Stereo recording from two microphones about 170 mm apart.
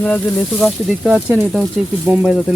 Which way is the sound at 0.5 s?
5° right (ahead or behind).